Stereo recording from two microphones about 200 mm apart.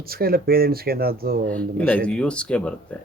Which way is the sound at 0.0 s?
50° right (ahead or behind).